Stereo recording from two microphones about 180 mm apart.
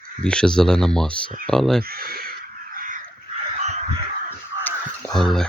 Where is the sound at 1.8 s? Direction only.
55° right (ahead or behind).